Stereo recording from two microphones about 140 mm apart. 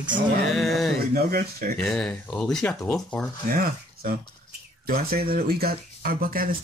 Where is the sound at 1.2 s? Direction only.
90° right.